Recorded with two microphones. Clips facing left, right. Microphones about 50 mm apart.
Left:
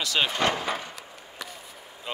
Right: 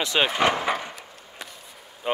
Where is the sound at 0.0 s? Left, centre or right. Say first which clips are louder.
Right 3 dB; right.